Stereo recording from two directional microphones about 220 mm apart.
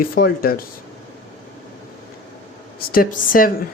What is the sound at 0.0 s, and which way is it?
Speech, 45° left (ahead or behind).